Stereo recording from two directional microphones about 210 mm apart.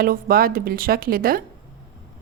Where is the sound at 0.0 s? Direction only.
45° right (ahead or behind).